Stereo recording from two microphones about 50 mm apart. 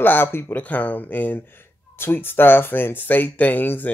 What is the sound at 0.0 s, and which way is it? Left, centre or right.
Speech, left.